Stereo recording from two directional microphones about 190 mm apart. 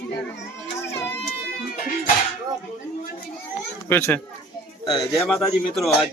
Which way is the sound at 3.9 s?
10° left (ahead or behind).